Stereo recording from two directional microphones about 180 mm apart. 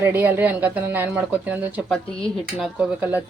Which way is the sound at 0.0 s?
10° right (ahead or behind).